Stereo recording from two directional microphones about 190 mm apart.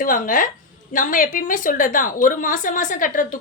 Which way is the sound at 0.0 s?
45° left (ahead or behind).